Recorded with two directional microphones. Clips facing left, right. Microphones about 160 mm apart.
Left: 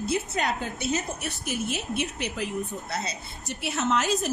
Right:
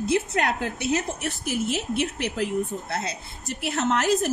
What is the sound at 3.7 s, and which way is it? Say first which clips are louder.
Speech: right 3 dB; 65° right (ahead or behind).